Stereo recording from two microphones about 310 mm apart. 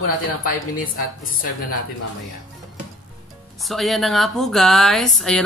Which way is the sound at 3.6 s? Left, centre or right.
Centre.